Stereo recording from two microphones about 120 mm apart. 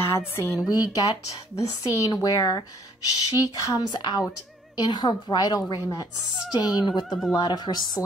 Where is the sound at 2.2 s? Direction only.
30° left (ahead or behind).